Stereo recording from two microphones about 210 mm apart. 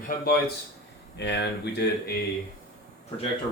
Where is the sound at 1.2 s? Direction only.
55° left (ahead or behind).